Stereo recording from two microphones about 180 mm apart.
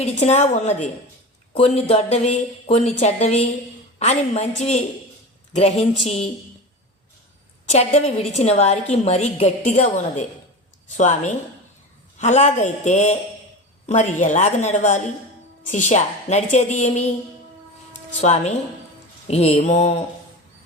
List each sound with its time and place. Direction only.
0.0 s a woman's voice: 40° left (ahead or behind)
7.7 s a woman's voice: 35° left (ahead or behind)
18.2 s a woman's voice: 40° left (ahead or behind)